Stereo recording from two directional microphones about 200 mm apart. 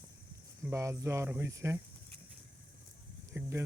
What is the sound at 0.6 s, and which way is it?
Speech, 15° right (ahead or behind).